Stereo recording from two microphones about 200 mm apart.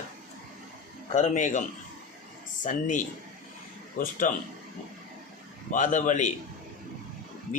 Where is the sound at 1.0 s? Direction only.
35° left (ahead or behind).